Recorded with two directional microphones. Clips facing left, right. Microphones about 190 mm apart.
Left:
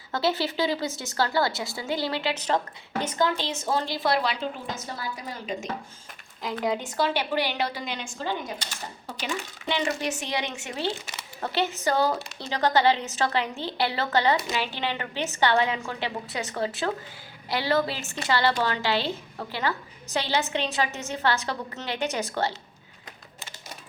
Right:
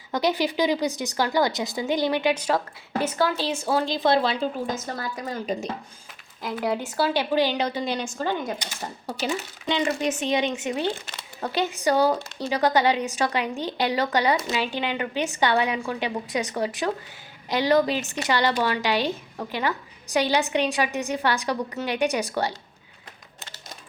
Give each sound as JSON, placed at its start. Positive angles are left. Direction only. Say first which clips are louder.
{"t": 0.1, "sound": "a woman's voice", "louder": "right 3 dB", "side_deg": -15}
{"t": 4.9, "sound": "a woman's voice", "louder": "right 5 dB", "side_deg": -45}
{"t": 6.6, "sound": "a woman's voice", "louder": "right 2 dB", "side_deg": -5}
{"t": 7.9, "sound": "a woman's voice", "louder": "right 5 dB", "side_deg": -40}
{"t": 9.6, "sound": "a woman's voice", "louder": "right 3 dB", "side_deg": -20}